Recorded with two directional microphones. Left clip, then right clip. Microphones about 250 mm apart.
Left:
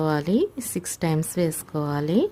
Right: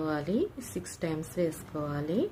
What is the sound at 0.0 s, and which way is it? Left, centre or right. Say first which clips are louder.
A woman's voice: left 8 dB; left.